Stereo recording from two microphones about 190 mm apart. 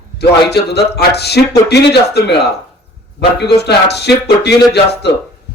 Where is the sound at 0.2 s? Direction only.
60° left (ahead or behind).